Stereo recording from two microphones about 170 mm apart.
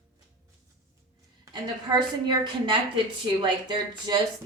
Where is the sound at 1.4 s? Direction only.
25° right (ahead or behind).